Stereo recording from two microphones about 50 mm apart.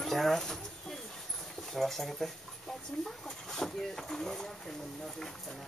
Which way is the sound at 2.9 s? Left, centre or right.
Centre.